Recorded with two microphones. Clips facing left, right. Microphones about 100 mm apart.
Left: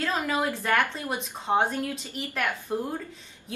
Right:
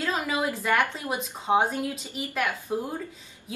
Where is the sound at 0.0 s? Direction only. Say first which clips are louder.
Even; 10° right (ahead or behind).